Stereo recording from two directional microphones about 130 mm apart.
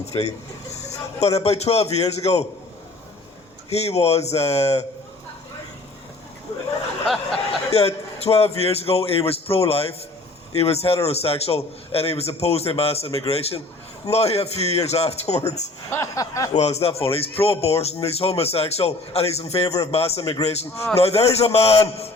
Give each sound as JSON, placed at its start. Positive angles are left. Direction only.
{"t": 0.0, "sound": "a man's voice", "side_deg": 55}
{"t": 3.7, "sound": "speech", "side_deg": 55}
{"t": 7.7, "sound": "speech", "side_deg": 50}
{"t": 15.9, "sound": "speech", "side_deg": 20}
{"t": 16.5, "sound": "speech", "side_deg": 60}
{"t": 19.6, "sound": "speech", "side_deg": 25}
{"t": 19.9, "sound": "speech", "side_deg": 50}